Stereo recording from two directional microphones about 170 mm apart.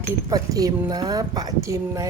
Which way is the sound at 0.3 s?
20° right (ahead or behind).